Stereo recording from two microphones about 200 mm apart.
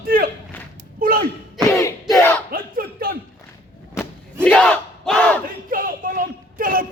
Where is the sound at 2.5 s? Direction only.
45° right (ahead or behind).